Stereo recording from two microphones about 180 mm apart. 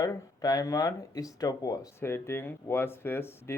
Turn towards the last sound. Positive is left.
turn(degrees=15)  # may be behind; listen again after turning